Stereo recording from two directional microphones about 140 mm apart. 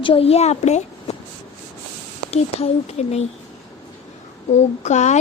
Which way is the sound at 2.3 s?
45° left (ahead or behind).